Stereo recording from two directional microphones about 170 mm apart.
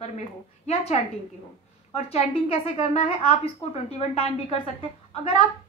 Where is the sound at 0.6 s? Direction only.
40° left (ahead or behind).